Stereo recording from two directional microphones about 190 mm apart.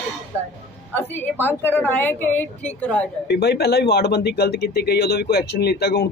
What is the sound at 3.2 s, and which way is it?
Speech, 60° left (ahead or behind).